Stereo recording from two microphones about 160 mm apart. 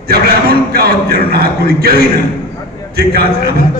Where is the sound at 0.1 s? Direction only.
80° right.